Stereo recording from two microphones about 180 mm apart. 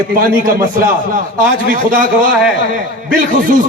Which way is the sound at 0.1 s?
50° right (ahead or behind).